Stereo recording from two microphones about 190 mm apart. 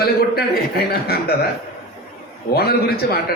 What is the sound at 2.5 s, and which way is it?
Speech, 55° left (ahead or behind).